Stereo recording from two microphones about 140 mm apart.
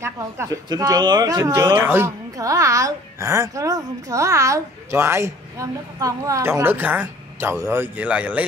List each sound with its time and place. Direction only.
0.7 s speech: 30° right (ahead or behind); by 8.5 s 10° right (ahead or behind)